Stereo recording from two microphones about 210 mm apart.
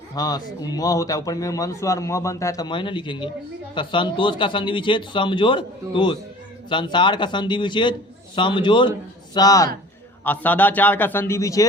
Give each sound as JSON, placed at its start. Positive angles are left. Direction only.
{"t": 0.2, "sound": "a man's voice", "side_deg": 20}